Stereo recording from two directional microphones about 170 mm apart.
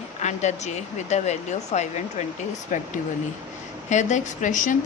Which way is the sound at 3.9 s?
45° left (ahead or behind).